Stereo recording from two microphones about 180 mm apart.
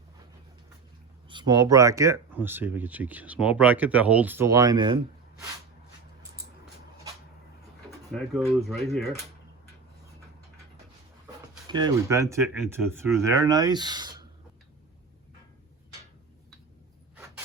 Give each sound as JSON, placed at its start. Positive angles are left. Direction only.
{"t": 1.3, "sound": "speech", "side_deg": -25}
{"t": 7.9, "sound": "speech", "side_deg": 0}
{"t": 11.7, "sound": "speech", "side_deg": -25}